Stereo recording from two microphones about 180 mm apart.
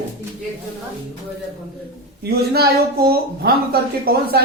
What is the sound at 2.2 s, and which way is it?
Speech, 65° right (ahead or behind).